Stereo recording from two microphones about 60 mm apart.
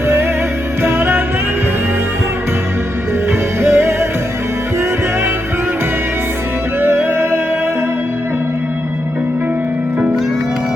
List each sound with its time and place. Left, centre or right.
0.9 s music: right
3.6 s music: right